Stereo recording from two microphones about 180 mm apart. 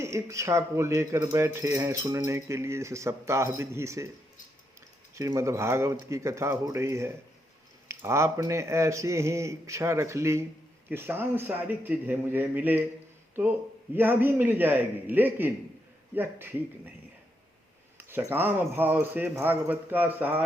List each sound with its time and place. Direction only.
0.0 s speech: 15° right (ahead or behind)
5.1 s speech: 15° right (ahead or behind)
13.9 s speech: 10° right (ahead or behind)
17.9 s speech: 10° right (ahead or behind)